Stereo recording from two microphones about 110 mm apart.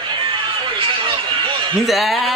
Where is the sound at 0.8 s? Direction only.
50° right (ahead or behind).